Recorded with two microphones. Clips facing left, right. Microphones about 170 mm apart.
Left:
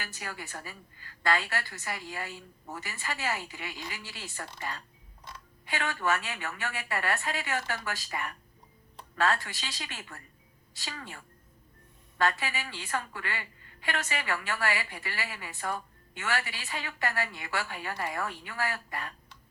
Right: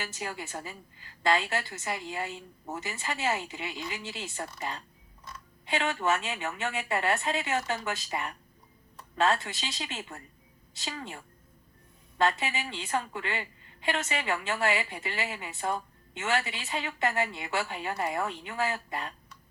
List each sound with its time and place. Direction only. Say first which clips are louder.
0.0 s a woman's voice: right 4 dB; 20° right (ahead or behind)
5.6 s a woman's voice: right 3 dB; 20° right (ahead or behind)